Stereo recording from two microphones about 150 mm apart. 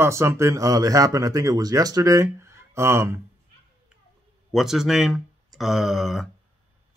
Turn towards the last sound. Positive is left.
turn(degrees=0)  # may be behind; listen again after turning